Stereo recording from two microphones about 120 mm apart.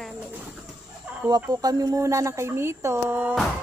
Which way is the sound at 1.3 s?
30° right (ahead or behind).